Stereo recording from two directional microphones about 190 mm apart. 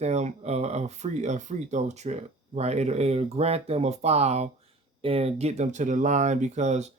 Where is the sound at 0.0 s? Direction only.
35° right (ahead or behind).